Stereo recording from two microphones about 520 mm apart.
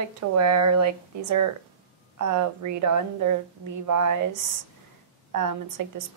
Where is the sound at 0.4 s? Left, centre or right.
Right.